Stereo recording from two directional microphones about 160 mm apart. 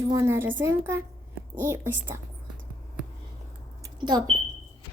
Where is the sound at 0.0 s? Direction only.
20° right (ahead or behind).